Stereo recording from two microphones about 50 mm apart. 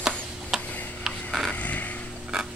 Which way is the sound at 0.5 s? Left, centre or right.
Centre.